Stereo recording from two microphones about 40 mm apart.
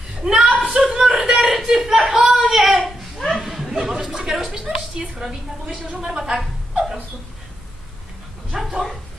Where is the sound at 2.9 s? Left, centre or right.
Centre.